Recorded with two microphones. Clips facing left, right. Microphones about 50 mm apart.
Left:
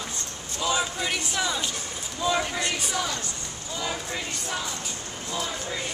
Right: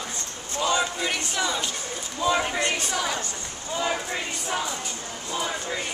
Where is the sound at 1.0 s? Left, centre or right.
Centre.